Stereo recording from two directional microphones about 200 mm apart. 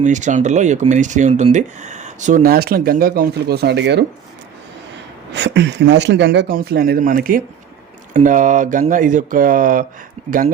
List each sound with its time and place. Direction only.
0.0 s speech: 40° right (ahead or behind); by 4.0 s 60° right (ahead or behind)
5.3 s speech: 60° right (ahead or behind); by 9.8 s 45° right (ahead or behind)
10.2 s speech: 30° right (ahead or behind)